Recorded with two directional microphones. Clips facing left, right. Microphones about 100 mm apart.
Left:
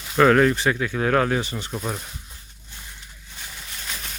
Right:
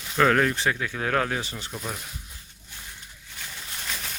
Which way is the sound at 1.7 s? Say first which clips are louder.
Left 5 dB; 25° left (ahead or behind).